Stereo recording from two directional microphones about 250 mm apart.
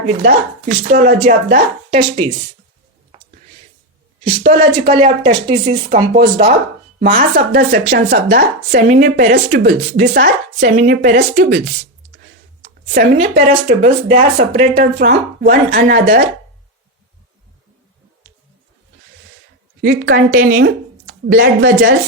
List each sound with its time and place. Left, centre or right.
0.1 s speech: right
1.9 s speech: right
4.3 s speech: right
7.0 s speech: right
19.8 s speech: right